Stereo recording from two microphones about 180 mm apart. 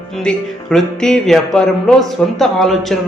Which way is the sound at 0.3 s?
5° left (ahead or behind).